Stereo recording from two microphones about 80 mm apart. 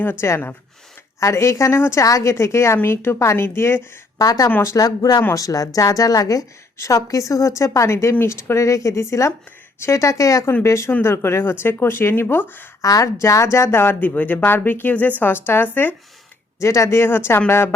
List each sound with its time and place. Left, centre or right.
0.0 s a woman's voice: left
4.2 s a woman's voice: left
4.4 s a woman's voice: left
4.8 s a woman's voice: left
12.8 s speech: left
16.6 s a woman's voice: left